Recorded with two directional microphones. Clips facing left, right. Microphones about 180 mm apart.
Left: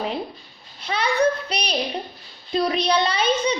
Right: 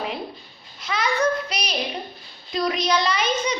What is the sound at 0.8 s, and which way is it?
Child singing, 30° left (ahead or behind).